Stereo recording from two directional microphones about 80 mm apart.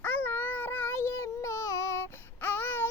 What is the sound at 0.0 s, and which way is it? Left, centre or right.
Child singing, left.